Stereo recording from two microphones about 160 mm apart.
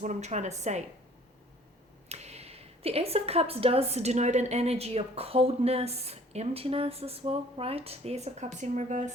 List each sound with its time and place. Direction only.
0.0 s a woman's voice: 50° right (ahead or behind)
2.0 s a woman's voice: 40° right (ahead or behind)